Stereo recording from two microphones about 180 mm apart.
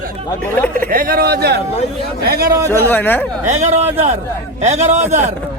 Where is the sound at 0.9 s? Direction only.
50° right (ahead or behind).